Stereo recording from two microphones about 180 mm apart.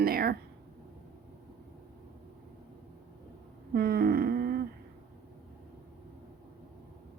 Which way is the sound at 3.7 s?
60° right (ahead or behind).